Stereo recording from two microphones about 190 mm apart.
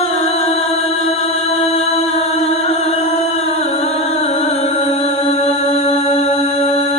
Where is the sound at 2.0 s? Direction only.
30° left (ahead or behind).